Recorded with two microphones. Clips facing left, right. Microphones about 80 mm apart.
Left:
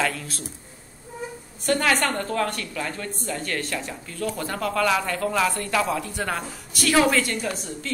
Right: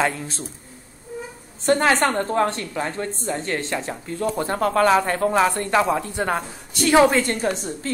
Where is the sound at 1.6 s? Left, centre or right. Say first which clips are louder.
Right 4 dB; right.